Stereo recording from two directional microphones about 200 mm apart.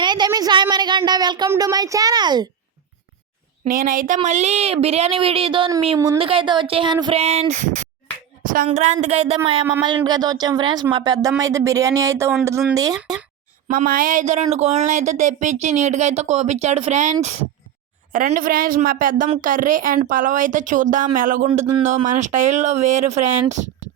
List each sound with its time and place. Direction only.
0.0 s speech: 20° right (ahead or behind)
3.6 s speech: 45° right (ahead or behind); by 13.0 s 20° right (ahead or behind)
13.7 s a woman's voice: 45° right (ahead or behind)